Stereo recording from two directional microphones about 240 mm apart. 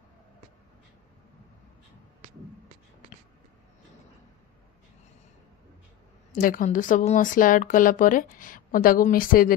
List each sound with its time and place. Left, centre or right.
6.4 s speech: left